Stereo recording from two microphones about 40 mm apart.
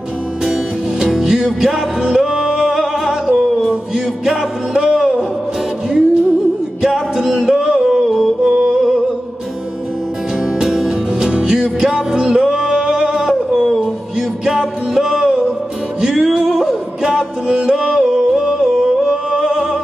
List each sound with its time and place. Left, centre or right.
0.5 s music: centre
10.6 s music: centre
16.4 s yodeling: centre
19.4 s music: right